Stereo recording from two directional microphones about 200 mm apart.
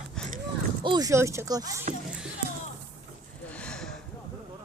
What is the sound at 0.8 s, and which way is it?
Speech, 20° right (ahead or behind).